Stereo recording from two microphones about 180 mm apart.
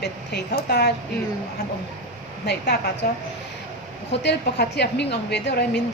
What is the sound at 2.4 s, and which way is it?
Speech, 65° left (ahead or behind).